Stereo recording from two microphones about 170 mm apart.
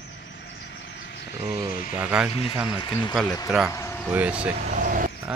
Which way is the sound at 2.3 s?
35° left (ahead or behind).